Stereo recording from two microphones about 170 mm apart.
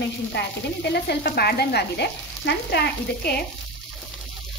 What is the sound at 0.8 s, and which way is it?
Speech, 70° left (ahead or behind).